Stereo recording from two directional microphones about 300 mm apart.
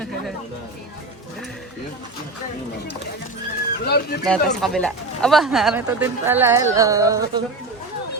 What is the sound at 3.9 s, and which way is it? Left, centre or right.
Speech, left.